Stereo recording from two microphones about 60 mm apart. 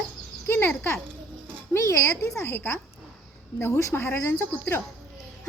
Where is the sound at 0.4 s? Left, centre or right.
Left.